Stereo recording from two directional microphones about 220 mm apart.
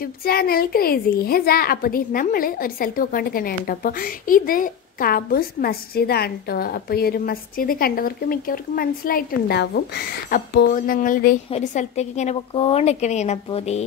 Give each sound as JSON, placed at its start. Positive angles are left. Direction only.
{"t": 0.0, "sound": "a woman's voice", "side_deg": 45}